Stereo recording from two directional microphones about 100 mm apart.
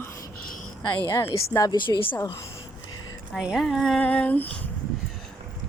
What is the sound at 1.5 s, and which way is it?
Speech, 40° left (ahead or behind).